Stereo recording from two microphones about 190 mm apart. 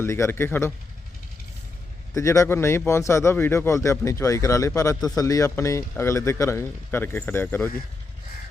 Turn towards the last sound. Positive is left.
turn(degrees=10)  # may be behind; listen again after turning